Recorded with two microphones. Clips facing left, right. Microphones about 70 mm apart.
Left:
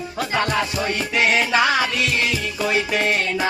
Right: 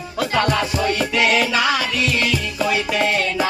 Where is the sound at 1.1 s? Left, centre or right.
Left.